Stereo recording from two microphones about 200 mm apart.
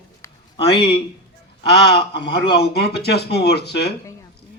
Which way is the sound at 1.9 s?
55° left (ahead or behind).